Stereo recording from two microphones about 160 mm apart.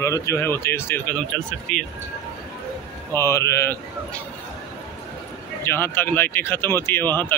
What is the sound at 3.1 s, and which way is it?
Speech, 15° left (ahead or behind).